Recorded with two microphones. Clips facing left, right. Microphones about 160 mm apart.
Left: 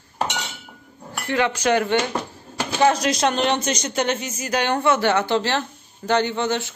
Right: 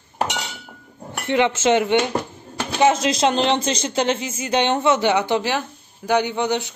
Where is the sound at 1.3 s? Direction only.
20° right (ahead or behind).